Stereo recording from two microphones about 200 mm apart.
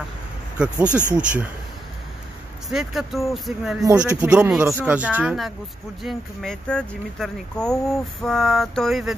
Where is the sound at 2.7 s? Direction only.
Centre (ahead or behind).